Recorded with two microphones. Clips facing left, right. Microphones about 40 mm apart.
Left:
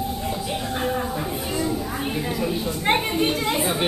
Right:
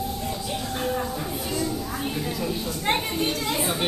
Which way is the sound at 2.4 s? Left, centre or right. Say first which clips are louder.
Left 3 dB; centre.